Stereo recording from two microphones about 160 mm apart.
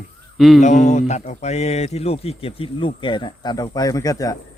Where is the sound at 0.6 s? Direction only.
50° left (ahead or behind).